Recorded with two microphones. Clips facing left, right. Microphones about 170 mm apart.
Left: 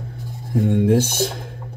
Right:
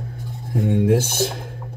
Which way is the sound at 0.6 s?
55° left (ahead or behind).